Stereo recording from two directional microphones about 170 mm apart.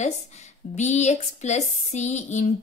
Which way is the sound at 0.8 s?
40° left (ahead or behind).